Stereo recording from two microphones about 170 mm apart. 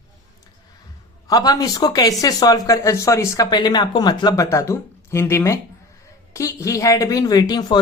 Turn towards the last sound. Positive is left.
turn(degrees=25)  # may be behind; listen again after turning